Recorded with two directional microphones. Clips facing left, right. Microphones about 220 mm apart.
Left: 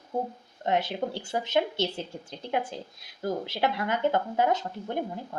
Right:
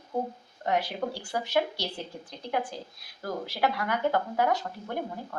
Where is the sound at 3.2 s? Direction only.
25° left (ahead or behind).